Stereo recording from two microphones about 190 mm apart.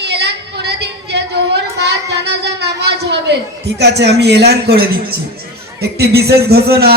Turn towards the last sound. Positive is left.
turn(degrees=-55)  # may be behind; listen again after turning